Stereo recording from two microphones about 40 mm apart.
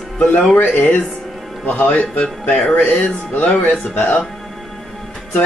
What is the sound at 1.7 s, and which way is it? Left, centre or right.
Speech, left.